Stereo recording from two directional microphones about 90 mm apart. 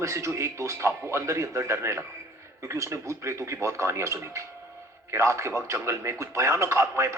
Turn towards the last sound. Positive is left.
turn(degrees=-30)  # may be behind; listen again after turning